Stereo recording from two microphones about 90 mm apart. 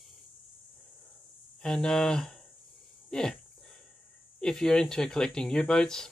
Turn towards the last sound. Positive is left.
turn(degrees=5)  # may be behind; listen again after turning